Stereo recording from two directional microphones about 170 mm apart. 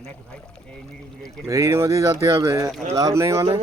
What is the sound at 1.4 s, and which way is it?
Speech, 20° right (ahead or behind).